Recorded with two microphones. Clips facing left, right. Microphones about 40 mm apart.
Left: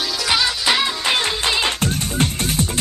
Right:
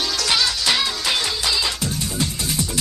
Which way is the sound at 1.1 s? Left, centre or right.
Left.